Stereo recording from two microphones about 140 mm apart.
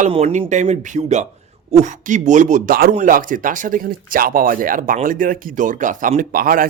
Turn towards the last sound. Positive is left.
turn(degrees=-90)